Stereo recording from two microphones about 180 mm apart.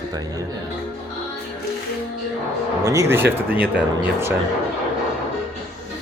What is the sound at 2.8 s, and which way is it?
Speech, 15° right (ahead or behind).